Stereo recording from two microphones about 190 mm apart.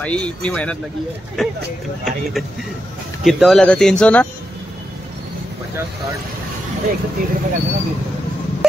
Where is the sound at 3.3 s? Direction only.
Centre (ahead or behind).